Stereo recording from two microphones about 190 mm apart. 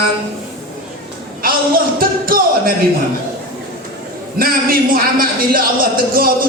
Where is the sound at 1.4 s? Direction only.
50° right (ahead or behind).